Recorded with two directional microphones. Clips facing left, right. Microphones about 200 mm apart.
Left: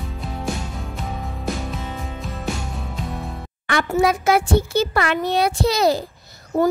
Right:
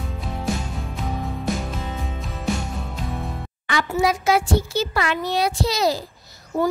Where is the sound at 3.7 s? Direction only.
55° left (ahead or behind).